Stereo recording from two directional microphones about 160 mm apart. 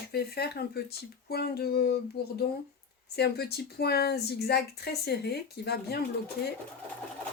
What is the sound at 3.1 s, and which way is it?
Speech, 90° left.